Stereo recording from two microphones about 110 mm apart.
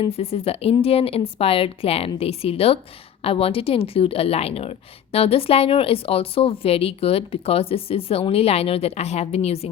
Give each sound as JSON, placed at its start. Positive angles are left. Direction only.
{"t": 0.1, "sound": "a woman's voice", "side_deg": 65}